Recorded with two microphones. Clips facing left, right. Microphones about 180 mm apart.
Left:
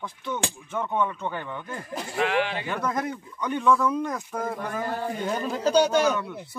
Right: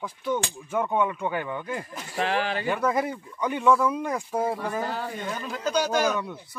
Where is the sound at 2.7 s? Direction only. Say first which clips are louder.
Right 3 dB; 5° right (ahead or behind).